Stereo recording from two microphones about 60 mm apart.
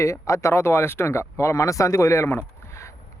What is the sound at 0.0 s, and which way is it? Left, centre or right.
Speech, left.